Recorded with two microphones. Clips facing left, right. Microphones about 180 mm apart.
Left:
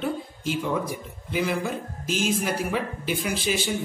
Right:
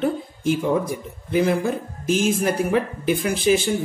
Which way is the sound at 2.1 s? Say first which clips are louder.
Right 5 dB; 50° right (ahead or behind).